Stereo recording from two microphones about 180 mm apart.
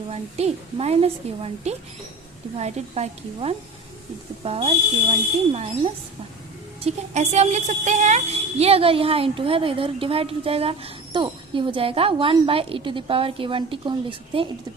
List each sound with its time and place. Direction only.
0.1 s a woman's voice: 35° right (ahead or behind)